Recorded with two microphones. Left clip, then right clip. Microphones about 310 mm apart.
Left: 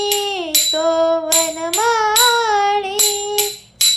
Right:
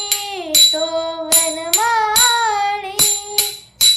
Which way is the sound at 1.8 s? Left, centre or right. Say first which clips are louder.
Left 1 dB; centre.